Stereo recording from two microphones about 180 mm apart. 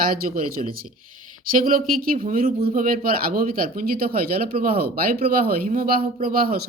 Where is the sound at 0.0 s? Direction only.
50° right (ahead or behind).